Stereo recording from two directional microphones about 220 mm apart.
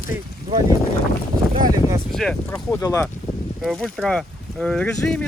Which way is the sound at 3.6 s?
Centre (ahead or behind).